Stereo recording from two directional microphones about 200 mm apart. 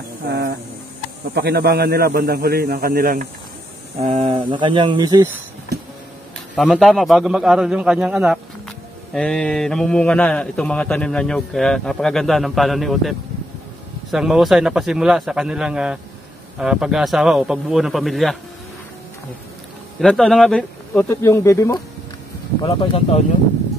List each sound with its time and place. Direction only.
0.3 s a man's voice: 55° right (ahead or behind)
4.0 s speech: 30° right (ahead or behind)
6.5 s a man's voice: centre (ahead or behind)
14.1 s a man's voice: centre (ahead or behind)
20.0 s speech: centre (ahead or behind); by 23.2 s 25° left (ahead or behind)